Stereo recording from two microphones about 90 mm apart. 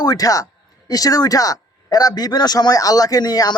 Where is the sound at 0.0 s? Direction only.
45° left (ahead or behind).